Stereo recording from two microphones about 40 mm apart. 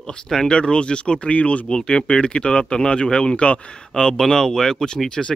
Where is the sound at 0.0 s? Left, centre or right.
Centre.